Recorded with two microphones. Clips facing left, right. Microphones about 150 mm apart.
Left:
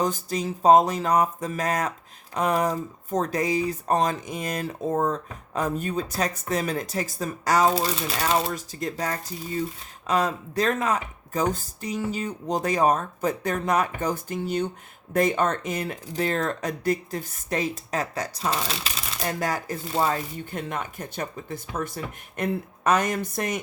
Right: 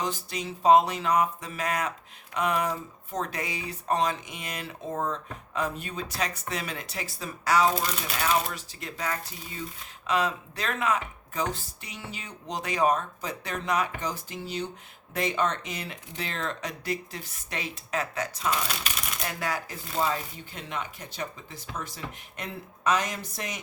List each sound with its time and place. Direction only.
0.0 s speech: 40° left (ahead or behind)